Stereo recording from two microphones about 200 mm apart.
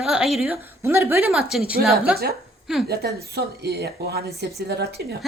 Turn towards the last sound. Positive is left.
turn(degrees=-55)  # may be behind; listen again after turning